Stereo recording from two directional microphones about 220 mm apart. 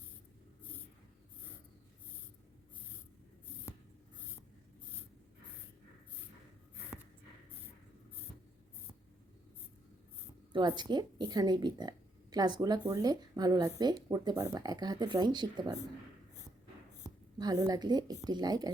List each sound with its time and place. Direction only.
10.5 s a woman's voice: 20° right (ahead or behind)
17.3 s a woman's voice: 15° right (ahead or behind)